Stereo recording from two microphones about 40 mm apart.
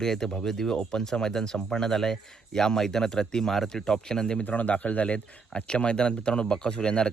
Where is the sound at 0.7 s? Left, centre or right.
Left.